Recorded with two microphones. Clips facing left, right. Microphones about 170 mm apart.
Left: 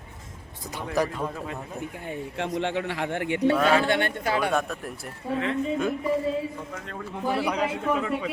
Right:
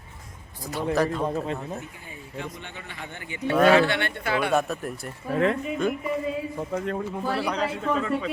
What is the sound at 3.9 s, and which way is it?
Speech, 40° left (ahead or behind).